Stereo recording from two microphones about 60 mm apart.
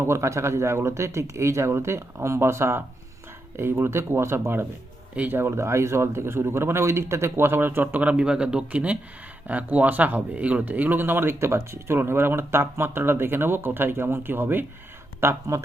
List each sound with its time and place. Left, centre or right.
0.0 s speech: right
8.1 s speech: centre; by 14.6 s right
15.2 s speech: right